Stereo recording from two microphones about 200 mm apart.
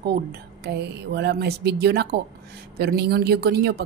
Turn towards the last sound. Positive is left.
turn(degrees=-50)  # may be behind; listen again after turning